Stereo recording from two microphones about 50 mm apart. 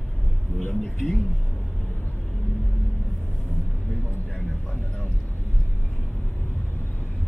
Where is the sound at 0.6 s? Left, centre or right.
Left.